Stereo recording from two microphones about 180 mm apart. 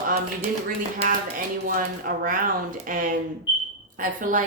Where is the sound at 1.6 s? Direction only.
50° right (ahead or behind).